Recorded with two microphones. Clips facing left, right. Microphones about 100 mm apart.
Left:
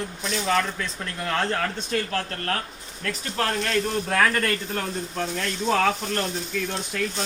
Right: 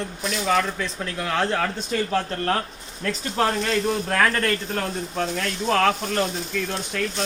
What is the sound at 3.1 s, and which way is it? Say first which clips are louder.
Speech: right 4 dB; 20° right (ahead or behind).